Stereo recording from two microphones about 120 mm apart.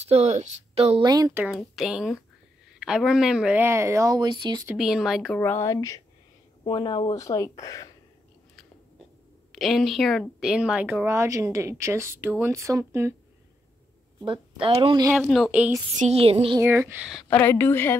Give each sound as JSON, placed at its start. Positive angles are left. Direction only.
{"t": 0.1, "sound": "speech", "side_deg": -70}
{"t": 1.0, "sound": "speech", "side_deg": -35}
{"t": 1.8, "sound": "speech", "side_deg": -5}
{"t": 4.7, "sound": "speech", "side_deg": -5}
{"t": 5.4, "sound": "speech", "side_deg": 20}
{"t": 6.6, "sound": "speech", "side_deg": 40}
{"t": 7.2, "sound": "speech", "side_deg": 30}
{"t": 9.5, "sound": "speech", "side_deg": 0}
{"t": 14.2, "sound": "speech", "side_deg": -45}
{"t": 15.2, "sound": "speech", "side_deg": 0}
{"t": 16.0, "sound": "speech", "side_deg": -60}
{"t": 16.6, "sound": "speech", "side_deg": -15}
{"t": 17.3, "sound": "speech", "side_deg": 15}